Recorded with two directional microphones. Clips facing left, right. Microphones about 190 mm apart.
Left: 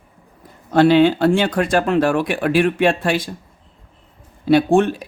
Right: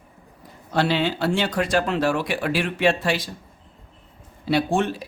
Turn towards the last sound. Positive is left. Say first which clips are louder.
# left 7 dB
turn(degrees=55)  # may be behind; listen again after turning